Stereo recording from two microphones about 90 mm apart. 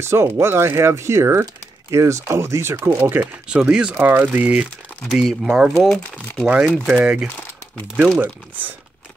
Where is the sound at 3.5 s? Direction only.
10° right (ahead or behind).